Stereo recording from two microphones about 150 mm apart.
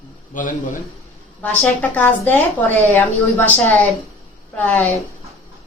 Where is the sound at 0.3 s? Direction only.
60° left (ahead or behind).